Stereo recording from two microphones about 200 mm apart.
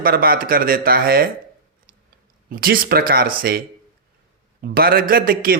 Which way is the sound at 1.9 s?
45° right (ahead or behind).